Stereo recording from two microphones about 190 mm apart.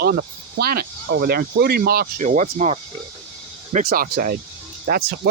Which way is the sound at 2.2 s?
40° right (ahead or behind).